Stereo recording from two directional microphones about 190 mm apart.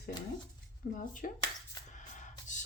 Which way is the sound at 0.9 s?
45° left (ahead or behind).